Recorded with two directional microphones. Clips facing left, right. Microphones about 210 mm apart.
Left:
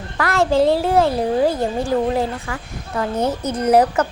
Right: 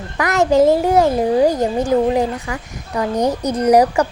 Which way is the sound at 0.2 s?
15° right (ahead or behind).